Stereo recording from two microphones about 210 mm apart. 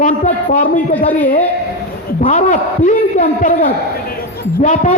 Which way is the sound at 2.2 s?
35° left (ahead or behind).